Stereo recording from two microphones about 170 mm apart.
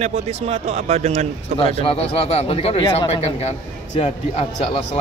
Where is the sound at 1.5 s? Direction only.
30° left (ahead or behind).